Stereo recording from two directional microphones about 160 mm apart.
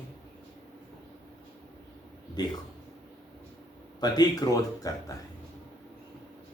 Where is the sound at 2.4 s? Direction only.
25° left (ahead or behind).